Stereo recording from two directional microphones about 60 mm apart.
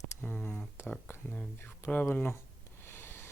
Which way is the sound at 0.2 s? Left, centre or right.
Left.